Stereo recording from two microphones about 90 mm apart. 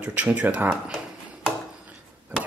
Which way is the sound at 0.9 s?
10° right (ahead or behind).